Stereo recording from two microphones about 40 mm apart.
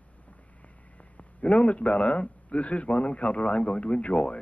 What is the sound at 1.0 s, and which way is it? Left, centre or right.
A man's voice, left.